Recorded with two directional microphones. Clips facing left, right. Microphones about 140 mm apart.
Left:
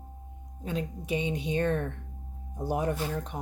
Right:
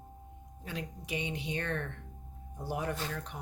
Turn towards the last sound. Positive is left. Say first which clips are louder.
# left 6 dB
turn(degrees=20)  # may be behind; listen again after turning